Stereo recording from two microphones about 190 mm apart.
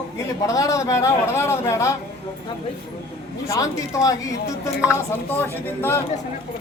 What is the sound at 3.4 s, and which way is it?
A man's voice, 15° left (ahead or behind).